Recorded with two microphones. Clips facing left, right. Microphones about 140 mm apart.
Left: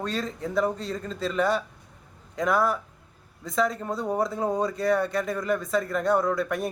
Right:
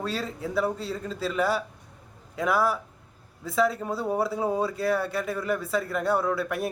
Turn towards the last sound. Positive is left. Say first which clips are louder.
# left 1 dB
turn(degrees=-5)  # may be behind; listen again after turning